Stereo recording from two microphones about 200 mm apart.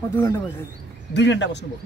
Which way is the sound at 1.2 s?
60° left (ahead or behind).